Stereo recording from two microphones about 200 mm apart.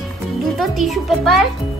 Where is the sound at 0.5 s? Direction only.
Centre (ahead or behind).